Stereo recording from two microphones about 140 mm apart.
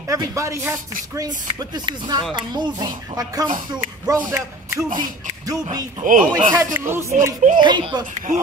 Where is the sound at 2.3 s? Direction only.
30° right (ahead or behind).